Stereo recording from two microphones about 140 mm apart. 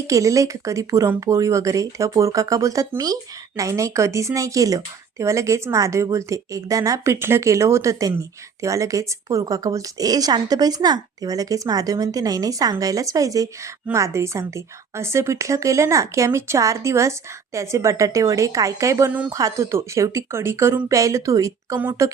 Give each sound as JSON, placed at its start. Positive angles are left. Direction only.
{"t": 0.1, "sound": "speech", "side_deg": -25}